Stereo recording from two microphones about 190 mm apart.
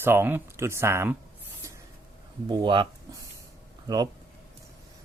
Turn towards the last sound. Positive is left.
turn(degrees=-20)  # may be behind; listen again after turning